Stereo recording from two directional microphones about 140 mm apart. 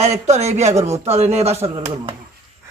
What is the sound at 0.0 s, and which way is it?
A man's voice, 50° right (ahead or behind).